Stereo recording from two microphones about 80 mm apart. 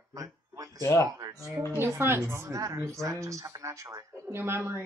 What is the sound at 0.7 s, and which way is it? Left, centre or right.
Speech, left.